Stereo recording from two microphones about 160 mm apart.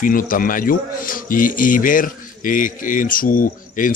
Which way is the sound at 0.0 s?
60° left (ahead or behind).